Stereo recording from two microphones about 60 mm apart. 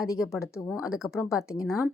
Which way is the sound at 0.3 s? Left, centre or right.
Left.